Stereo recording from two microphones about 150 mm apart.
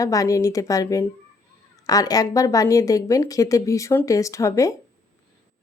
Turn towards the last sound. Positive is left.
turn(degrees=20)  # may be behind; listen again after turning